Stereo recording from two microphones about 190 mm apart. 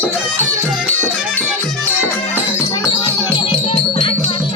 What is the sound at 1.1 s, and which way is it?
Music, centre (ahead or behind).